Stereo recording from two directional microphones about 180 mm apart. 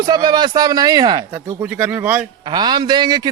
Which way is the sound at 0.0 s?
25° right (ahead or behind).